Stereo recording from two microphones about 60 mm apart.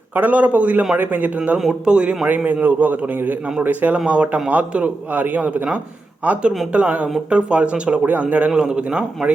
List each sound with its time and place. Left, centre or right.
0.2 s a man's voice: right
1.5 s speech: centre
2.2 s a man's voice: right